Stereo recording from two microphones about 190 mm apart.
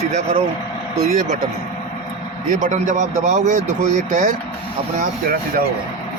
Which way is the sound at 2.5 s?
40° right (ahead or behind).